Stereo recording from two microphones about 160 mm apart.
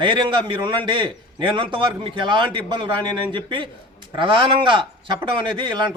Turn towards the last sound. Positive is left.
turn(degrees=-30)  # may be behind; listen again after turning